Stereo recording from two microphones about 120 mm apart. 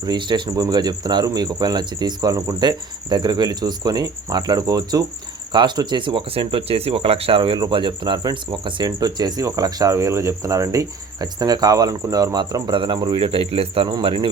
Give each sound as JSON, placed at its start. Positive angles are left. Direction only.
{"t": 0.0, "sound": "speech", "side_deg": -40}